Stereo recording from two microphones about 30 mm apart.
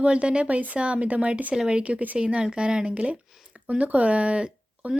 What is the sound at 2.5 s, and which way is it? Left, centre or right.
Speech, right.